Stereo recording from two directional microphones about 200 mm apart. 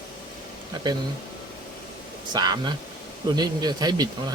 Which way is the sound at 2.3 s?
20° right (ahead or behind).